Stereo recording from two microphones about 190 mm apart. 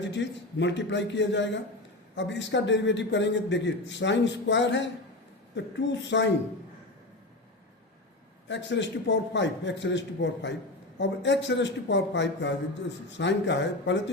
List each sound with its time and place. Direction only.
0.6 s a man's voice: 70° left (ahead or behind)
8.4 s a man's voice: 70° left (ahead or behind)